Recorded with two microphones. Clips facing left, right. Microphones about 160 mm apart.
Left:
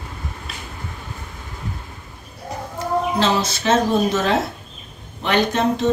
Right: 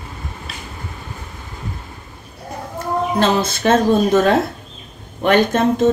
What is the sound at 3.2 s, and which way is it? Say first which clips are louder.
Speech: right 3 dB; 55° right (ahead or behind).